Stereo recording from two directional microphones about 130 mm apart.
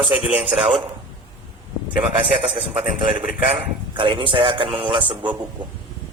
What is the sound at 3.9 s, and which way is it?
Speech, 40° right (ahead or behind).